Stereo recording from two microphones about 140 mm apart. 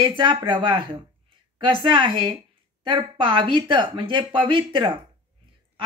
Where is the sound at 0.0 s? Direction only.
35° right (ahead or behind).